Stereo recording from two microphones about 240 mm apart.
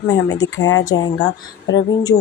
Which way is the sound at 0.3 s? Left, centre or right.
Centre.